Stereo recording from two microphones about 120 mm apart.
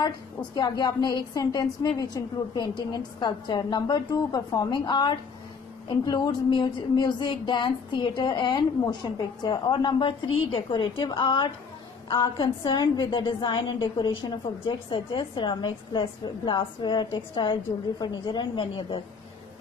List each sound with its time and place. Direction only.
0.6 s a woman's voice: 35° left (ahead or behind)